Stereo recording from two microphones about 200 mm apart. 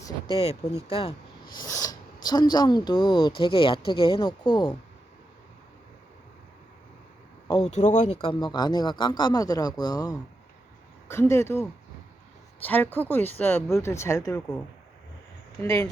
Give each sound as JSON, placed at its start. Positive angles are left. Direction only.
{"t": 0.0, "sound": "speech", "side_deg": 25}
{"t": 1.5, "sound": "speech", "side_deg": 15}
{"t": 7.7, "sound": "speech", "side_deg": 35}
{"t": 15.6, "sound": "speech", "side_deg": 10}